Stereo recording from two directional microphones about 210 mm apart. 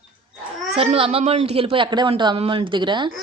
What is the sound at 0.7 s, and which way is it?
Speech, 30° right (ahead or behind).